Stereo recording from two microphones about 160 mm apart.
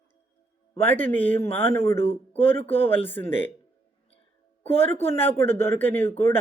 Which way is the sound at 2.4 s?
10° left (ahead or behind).